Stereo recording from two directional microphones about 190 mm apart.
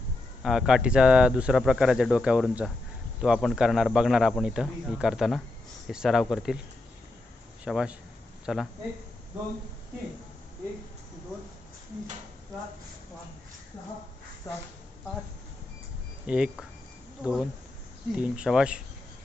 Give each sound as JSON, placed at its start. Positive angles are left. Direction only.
{"t": 0.4, "sound": "speech", "side_deg": -5}
{"t": 7.6, "sound": "speech", "side_deg": -5}
{"t": 14.5, "sound": "a woman's voice", "side_deg": 15}
{"t": 16.2, "sound": "speech", "side_deg": -5}